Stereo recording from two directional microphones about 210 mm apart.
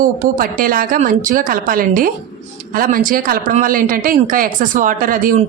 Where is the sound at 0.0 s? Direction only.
40° right (ahead or behind).